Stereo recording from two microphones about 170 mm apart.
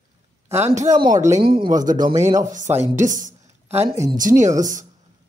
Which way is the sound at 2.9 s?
50° right (ahead or behind).